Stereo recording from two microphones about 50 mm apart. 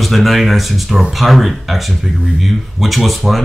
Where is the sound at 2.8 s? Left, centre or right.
Centre.